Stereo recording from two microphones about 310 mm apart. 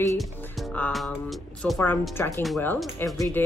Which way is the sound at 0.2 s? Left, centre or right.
Centre.